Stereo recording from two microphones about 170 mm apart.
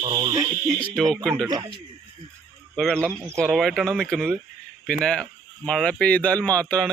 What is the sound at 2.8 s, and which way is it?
Speech, 5° left (ahead or behind).